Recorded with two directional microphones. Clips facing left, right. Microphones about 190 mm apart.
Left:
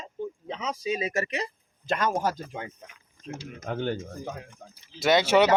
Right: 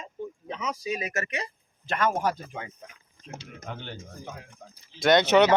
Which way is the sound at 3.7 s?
50° left (ahead or behind).